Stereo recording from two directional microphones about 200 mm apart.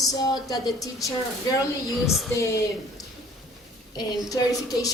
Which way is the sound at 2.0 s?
Centre (ahead or behind).